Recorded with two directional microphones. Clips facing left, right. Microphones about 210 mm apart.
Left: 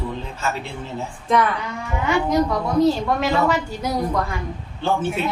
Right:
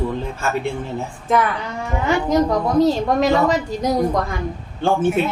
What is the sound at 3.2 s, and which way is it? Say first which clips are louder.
Speech: right 4 dB; 35° right (ahead or behind).